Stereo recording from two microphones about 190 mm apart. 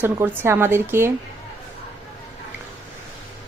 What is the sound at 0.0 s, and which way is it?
A woman's voice, 15° right (ahead or behind).